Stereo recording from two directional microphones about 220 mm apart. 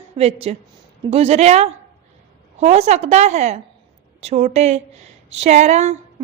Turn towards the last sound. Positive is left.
turn(degrees=-30)  # may be behind; listen again after turning